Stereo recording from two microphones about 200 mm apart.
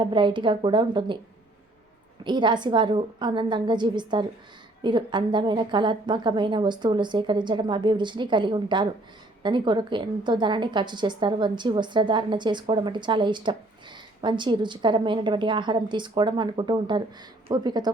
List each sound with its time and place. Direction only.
0.0 s a woman's voice: 25° right (ahead or behind)
2.2 s a woman's voice: 20° right (ahead or behind)